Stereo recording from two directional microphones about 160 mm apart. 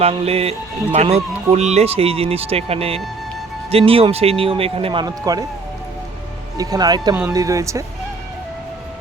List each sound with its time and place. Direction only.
0.0 s speech: 40° right (ahead or behind)
6.6 s speech: 25° right (ahead or behind)